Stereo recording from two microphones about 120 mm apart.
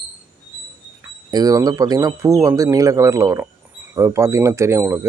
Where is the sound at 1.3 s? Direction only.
30° right (ahead or behind).